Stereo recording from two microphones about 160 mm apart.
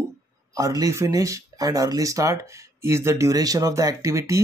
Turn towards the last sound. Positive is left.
turn(degrees=-20)  # may be behind; listen again after turning